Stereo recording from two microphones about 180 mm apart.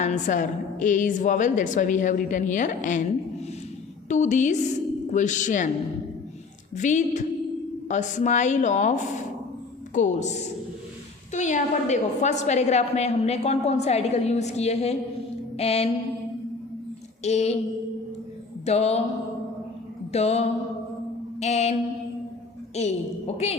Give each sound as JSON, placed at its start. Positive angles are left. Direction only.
{"t": 0.0, "sound": "a woman's voice", "side_deg": 45}
{"t": 4.1, "sound": "a woman's voice", "side_deg": 40}
{"t": 6.7, "sound": "a woman's voice", "side_deg": 45}
{"t": 17.2, "sound": "a woman's voice", "side_deg": 35}
{"t": 18.6, "sound": "a woman's voice", "side_deg": 35}
{"t": 20.1, "sound": "a woman's voice", "side_deg": 35}
{"t": 21.3, "sound": "mantra", "side_deg": 40}
{"t": 22.7, "sound": "a woman's voice", "side_deg": 35}